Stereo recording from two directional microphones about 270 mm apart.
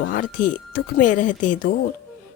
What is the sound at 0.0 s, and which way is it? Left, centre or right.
Speech, left.